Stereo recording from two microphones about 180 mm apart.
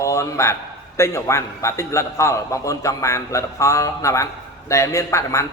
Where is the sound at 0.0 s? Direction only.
15° left (ahead or behind).